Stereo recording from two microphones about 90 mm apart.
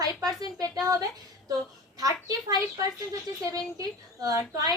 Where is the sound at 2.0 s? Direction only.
40° right (ahead or behind).